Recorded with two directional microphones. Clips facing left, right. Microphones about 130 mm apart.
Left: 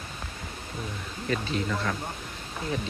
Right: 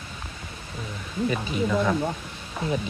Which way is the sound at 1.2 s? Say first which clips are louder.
Right 3 dB; 10° right (ahead or behind).